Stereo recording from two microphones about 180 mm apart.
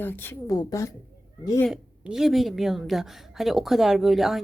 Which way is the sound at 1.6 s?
5° right (ahead or behind).